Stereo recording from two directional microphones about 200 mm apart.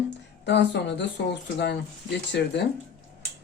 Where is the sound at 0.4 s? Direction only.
60° left (ahead or behind).